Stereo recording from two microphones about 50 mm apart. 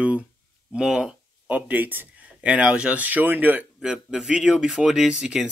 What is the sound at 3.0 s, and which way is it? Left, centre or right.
Speech, right.